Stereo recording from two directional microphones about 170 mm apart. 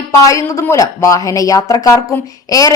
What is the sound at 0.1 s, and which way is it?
A woman's voice, 20° left (ahead or behind).